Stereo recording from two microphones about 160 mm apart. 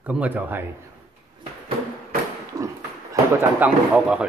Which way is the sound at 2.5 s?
25° right (ahead or behind).